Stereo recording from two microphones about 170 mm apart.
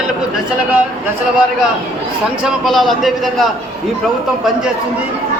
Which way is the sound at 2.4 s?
Centre (ahead or behind).